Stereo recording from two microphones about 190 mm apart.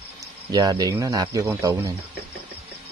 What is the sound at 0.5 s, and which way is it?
Speech, 20° right (ahead or behind).